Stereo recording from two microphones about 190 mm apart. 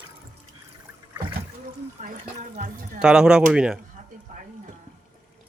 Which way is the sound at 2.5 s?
45° right (ahead or behind).